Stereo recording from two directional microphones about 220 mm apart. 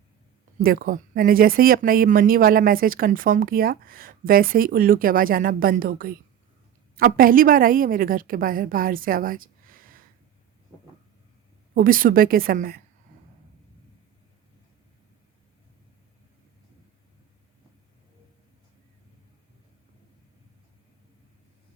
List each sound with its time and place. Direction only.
0.6 s speech: 40° right (ahead or behind)
11.7 s speech: 40° right (ahead or behind)